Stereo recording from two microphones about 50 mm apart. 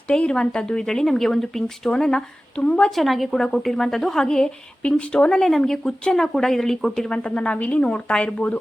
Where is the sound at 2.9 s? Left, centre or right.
Centre; by 5.4 s left.